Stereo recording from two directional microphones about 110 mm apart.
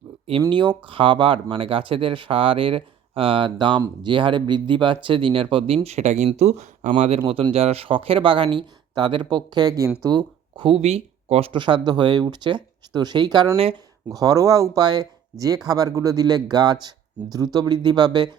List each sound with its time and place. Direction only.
0.5 s speech: 45° right (ahead or behind); by 7.2 s 90° right
7.5 s speech: 65° right (ahead or behind); by 10.8 s 45° right (ahead or behind)
10.8 s speech: 75° right (ahead or behind)
11.9 s speech: 45° right (ahead or behind)